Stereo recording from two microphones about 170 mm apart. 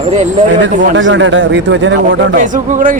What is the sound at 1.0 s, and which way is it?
A man's voice, 90° right.